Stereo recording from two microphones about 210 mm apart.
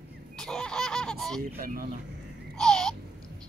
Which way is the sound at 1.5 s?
45° right (ahead or behind).